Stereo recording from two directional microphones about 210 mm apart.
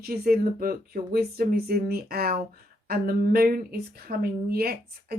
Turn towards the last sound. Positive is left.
turn(degrees=-45)  # may be behind; listen again after turning